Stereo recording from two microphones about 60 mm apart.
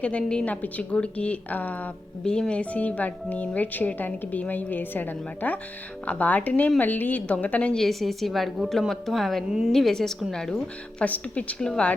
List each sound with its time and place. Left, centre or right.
0.0 s a woman's voice: centre
0.4 s speech: left
2.2 s speech: centre
7.8 s speech: centre
9.5 s a woman's voice: centre
9.7 s a woman's voice: centre
11.0 s speech: left
11.6 s a woman's voice: centre